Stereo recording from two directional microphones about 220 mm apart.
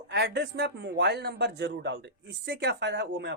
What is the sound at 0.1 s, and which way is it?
Speech, 50° right (ahead or behind).